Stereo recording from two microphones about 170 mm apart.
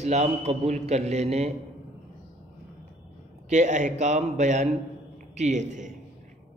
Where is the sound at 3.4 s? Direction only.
45° right (ahead or behind).